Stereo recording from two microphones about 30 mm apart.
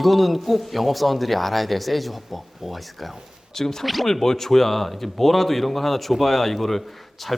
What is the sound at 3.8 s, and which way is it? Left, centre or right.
Speech, centre.